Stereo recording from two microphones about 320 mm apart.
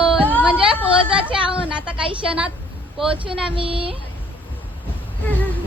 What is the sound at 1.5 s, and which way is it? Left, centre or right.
Speech, centre.